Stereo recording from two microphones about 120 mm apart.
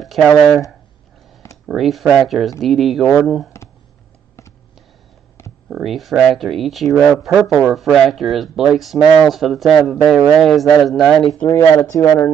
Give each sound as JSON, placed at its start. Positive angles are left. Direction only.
{"t": 0.0, "sound": "speech", "side_deg": 0}
{"t": 5.7, "sound": "speech", "side_deg": 0}
{"t": 11.9, "sound": "speech", "side_deg": 25}